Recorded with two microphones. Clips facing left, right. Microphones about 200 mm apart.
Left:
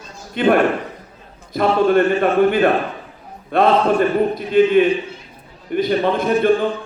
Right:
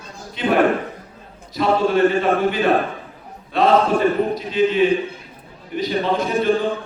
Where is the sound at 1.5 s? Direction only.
55° left (ahead or behind).